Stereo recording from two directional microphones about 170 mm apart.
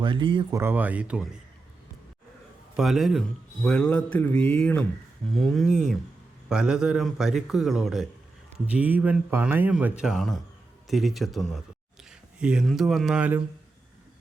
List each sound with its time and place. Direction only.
0.0 s speech: 30° right (ahead or behind)
0.5 s speech: 15° right (ahead or behind)
2.7 s speech: centre (ahead or behind)